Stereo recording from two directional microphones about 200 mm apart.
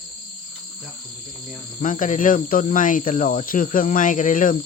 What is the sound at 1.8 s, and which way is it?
Cricket, 40° left (ahead or behind).